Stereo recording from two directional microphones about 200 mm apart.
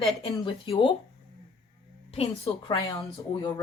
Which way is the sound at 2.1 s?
25° left (ahead or behind).